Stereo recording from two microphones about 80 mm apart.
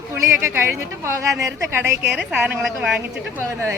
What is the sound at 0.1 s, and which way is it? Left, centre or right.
A woman's voice, right.